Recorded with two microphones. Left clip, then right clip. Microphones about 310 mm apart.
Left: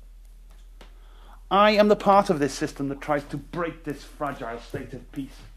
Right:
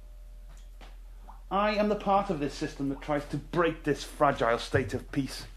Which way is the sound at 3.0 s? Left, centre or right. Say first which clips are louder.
Left 6 dB; left.